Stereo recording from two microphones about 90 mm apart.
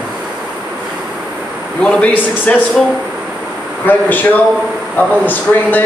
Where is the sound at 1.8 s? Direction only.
15° left (ahead or behind).